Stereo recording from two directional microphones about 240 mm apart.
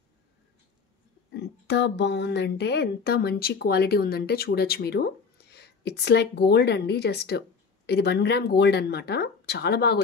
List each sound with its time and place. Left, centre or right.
1.3 s speech: left